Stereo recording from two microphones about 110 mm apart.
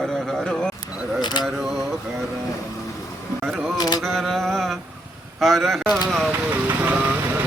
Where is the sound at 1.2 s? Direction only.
40° left (ahead or behind).